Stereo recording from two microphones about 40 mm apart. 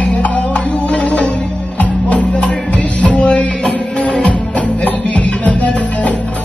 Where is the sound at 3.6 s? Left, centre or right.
Centre.